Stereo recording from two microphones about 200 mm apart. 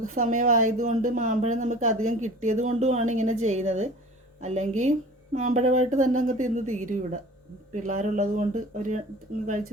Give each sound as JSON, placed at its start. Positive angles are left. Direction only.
{"t": 0.0, "sound": "speech", "side_deg": -40}